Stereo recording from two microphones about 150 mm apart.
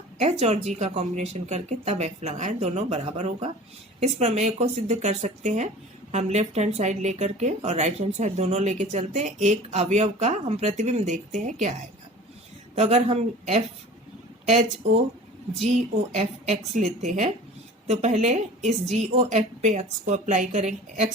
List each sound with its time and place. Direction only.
0.2 s speech: 50° right (ahead or behind)
12.7 s speech: 45° right (ahead or behind)
16.1 s speech: 50° right (ahead or behind)